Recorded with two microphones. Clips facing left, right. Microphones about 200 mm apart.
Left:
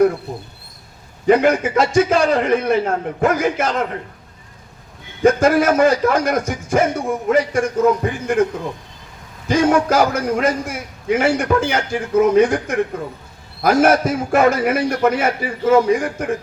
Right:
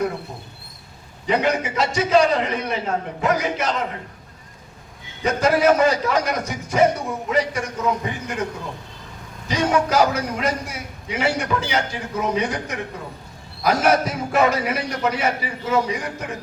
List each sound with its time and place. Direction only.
1.3 s a man's voice: 50° left (ahead or behind)
5.2 s a man's voice: 50° left (ahead or behind)
9.5 s a man's voice: 50° left (ahead or behind)